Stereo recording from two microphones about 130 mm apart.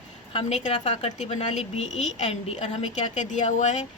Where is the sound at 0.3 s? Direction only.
60° left (ahead or behind).